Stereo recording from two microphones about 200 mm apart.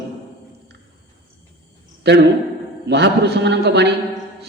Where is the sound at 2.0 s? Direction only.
60° right (ahead or behind).